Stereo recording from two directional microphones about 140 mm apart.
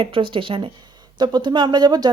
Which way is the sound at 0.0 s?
40° right (ahead or behind).